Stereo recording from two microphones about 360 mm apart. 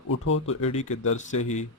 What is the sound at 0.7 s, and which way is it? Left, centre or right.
Speech, centre.